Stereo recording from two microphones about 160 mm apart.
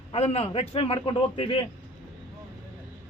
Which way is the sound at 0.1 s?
40° left (ahead or behind).